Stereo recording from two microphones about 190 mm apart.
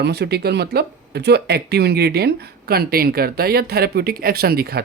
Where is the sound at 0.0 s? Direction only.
60° right (ahead or behind).